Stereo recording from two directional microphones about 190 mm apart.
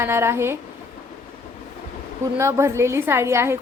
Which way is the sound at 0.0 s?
15° right (ahead or behind).